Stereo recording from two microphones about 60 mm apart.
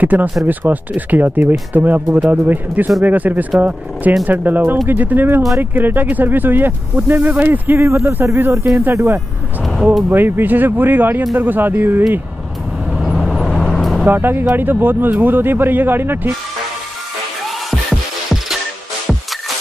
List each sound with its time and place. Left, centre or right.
0.0 s speech: right
7.8 s speech: right
12.9 s vehicle: centre
14.0 s speech: right